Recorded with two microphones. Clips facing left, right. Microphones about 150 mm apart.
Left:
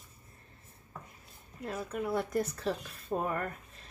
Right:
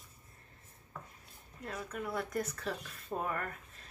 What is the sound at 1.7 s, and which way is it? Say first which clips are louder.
Speech: left 5 dB; 30° left (ahead or behind).